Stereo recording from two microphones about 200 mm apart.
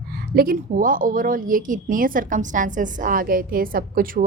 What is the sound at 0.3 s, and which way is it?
A woman's voice, 45° right (ahead or behind).